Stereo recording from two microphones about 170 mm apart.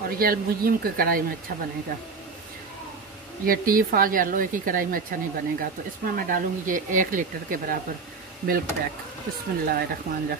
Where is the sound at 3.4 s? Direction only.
55° right (ahead or behind).